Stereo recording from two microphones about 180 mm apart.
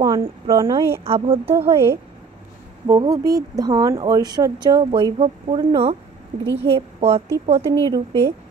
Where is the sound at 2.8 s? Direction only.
20° right (ahead or behind).